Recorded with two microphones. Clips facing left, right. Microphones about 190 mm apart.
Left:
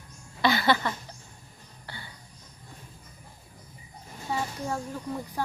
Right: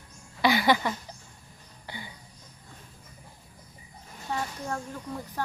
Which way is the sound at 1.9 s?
15° right (ahead or behind).